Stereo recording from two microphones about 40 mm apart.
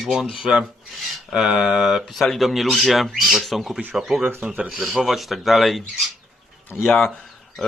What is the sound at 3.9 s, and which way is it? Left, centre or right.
Speech, centre.